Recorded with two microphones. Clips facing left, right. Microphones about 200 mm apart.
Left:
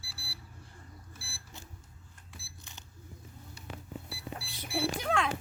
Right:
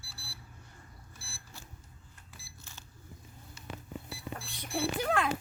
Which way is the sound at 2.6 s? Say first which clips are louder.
Even; 15° left (ahead or behind).